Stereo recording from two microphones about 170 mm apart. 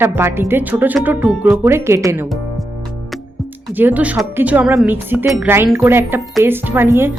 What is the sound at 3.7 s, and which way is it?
Speech, 10° right (ahead or behind).